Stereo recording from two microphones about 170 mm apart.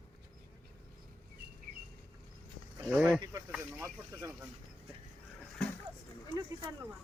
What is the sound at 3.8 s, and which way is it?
Speech, 15° right (ahead or behind).